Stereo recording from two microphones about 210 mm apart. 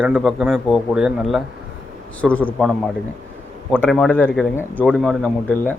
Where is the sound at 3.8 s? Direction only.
5° left (ahead or behind).